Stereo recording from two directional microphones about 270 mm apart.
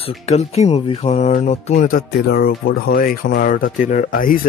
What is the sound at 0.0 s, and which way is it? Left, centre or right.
Speech, left.